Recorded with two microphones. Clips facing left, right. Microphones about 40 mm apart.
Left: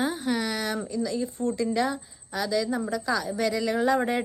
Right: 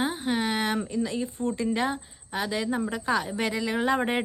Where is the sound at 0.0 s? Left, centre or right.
Right.